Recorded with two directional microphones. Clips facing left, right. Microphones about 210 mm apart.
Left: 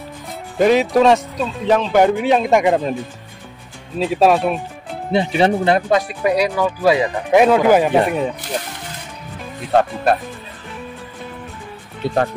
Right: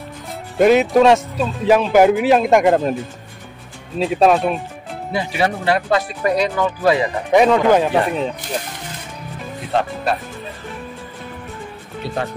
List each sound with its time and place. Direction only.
0.6 s speech: centre (ahead or behind)
4.0 s speech: centre (ahead or behind)
5.1 s speech: 25° left (ahead or behind)
6.2 s speech: 10° left (ahead or behind)
12.0 s speech: 55° left (ahead or behind)